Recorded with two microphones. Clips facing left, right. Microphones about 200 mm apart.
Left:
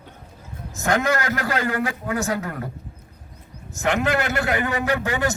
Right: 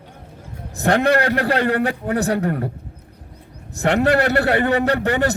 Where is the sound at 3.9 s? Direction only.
35° right (ahead or behind).